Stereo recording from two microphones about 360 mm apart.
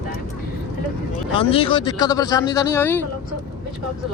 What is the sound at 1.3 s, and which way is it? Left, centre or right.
Speech, centre.